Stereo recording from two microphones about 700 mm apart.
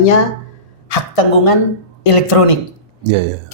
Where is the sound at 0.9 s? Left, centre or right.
Left.